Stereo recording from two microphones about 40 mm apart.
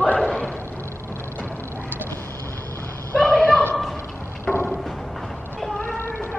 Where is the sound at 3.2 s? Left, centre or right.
Left.